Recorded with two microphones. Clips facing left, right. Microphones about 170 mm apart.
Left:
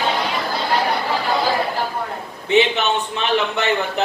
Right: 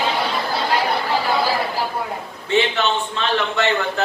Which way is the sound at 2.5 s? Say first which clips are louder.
Left 2 dB; 20° left (ahead or behind).